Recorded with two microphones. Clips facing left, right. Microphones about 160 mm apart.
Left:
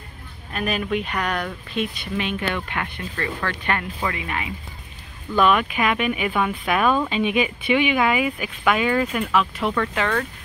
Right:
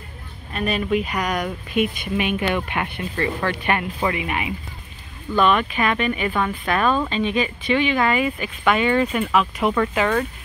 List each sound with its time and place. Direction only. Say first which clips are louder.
0.5 s speech: right 2 dB; centre (ahead or behind); by 4.5 s 15° right (ahead or behind)
5.3 s speech: even; 5° left (ahead or behind)